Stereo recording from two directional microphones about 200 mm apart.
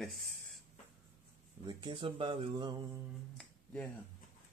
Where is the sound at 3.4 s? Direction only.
5° left (ahead or behind).